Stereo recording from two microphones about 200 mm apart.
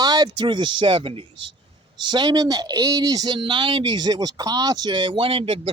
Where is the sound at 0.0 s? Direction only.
20° right (ahead or behind).